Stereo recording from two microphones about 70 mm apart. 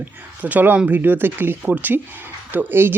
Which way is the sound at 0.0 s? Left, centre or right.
Right.